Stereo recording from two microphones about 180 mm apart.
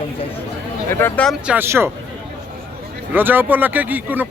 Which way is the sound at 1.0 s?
5° left (ahead or behind).